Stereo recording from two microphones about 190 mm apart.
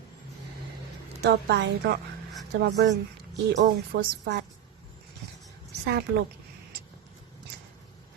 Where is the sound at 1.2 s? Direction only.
60° right (ahead or behind).